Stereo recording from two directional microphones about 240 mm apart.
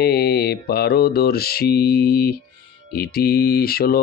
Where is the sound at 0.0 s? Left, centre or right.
Left.